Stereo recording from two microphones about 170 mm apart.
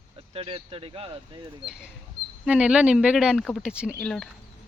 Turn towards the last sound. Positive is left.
turn(degrees=5)  # may be behind; listen again after turning